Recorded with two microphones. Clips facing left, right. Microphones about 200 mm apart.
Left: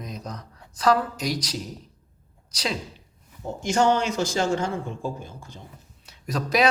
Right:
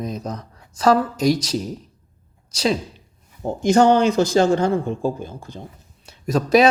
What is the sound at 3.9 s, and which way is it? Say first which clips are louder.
Speech: right 9 dB; 35° right (ahead or behind).